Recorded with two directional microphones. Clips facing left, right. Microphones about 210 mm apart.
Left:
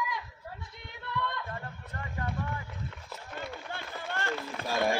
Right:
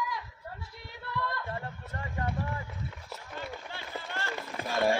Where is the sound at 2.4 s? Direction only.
5° right (ahead or behind).